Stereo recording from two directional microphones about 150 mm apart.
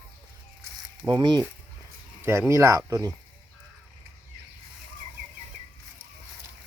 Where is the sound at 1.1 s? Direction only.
30° right (ahead or behind).